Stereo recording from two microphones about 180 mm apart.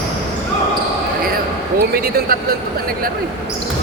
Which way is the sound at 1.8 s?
55° right (ahead or behind).